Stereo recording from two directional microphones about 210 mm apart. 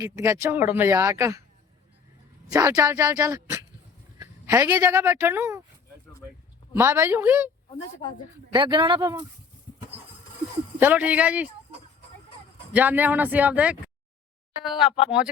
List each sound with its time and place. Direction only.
0.0 s speech: 15° right (ahead or behind)
2.5 s speech: 15° right (ahead or behind)
6.7 s speech: 10° right (ahead or behind)
8.5 s a man's voice: 25° right (ahead or behind)
10.8 s speech: 10° right (ahead or behind)
12.7 s speech: 10° right (ahead or behind)